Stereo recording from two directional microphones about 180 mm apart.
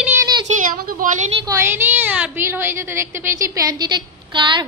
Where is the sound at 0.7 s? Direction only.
55° right (ahead or behind).